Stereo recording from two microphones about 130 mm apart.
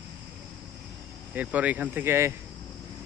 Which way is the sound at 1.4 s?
10° right (ahead or behind).